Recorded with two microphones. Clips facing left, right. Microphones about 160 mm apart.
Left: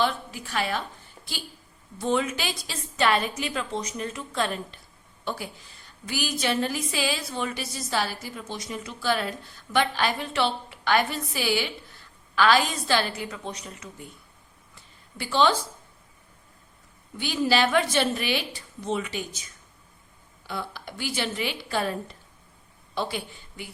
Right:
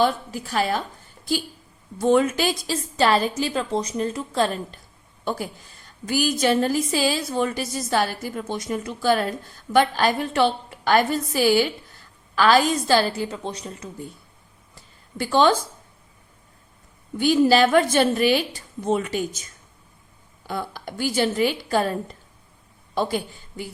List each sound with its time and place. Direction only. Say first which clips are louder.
0.0 s a woman's voice: right 5 dB; 40° right (ahead or behind)
2.0 s a woman's voice: right 7 dB; 45° right (ahead or behind)
14.8 s a sound: right 8 dB; 45° right (ahead or behind)
17.2 s a woman's voice: right 7 dB; 45° right (ahead or behind)
20.5 s a woman's voice: right 4 dB; 45° right (ahead or behind)